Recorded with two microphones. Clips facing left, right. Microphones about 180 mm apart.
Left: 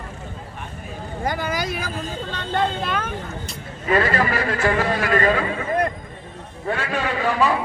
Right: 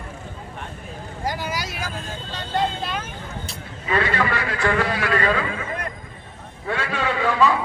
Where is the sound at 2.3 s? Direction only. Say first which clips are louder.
Left 1 dB; 60° left (ahead or behind).